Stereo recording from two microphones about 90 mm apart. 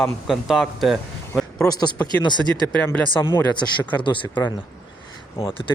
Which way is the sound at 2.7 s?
20° left (ahead or behind).